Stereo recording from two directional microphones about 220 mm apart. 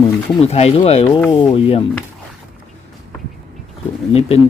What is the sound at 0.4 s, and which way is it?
Speech, 30° left (ahead or behind).